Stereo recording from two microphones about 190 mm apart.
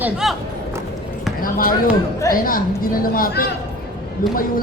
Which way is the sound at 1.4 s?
50° left (ahead or behind).